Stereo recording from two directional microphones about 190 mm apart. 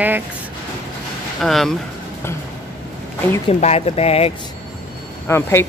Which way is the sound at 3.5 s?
35° left (ahead or behind).